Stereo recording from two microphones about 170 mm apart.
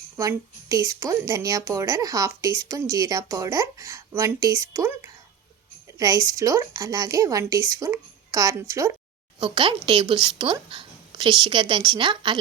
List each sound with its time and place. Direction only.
0.2 s a woman's voice: 20° right (ahead or behind)
9.4 s a woman's voice: 30° right (ahead or behind)